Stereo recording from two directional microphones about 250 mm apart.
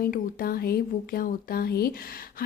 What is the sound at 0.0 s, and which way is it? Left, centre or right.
A woman's voice, left.